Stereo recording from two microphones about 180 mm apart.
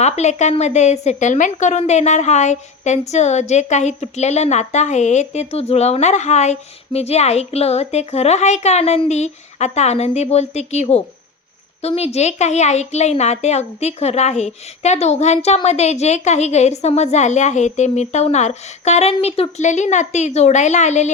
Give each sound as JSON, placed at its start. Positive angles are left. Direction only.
{"t": 0.0, "sound": "a woman's voice", "side_deg": 40}